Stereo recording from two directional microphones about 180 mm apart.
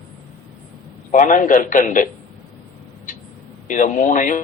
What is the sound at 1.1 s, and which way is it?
A man's voice, 45° left (ahead or behind).